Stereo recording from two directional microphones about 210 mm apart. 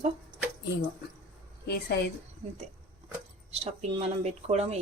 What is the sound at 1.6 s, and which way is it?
Speech, 50° left (ahead or behind).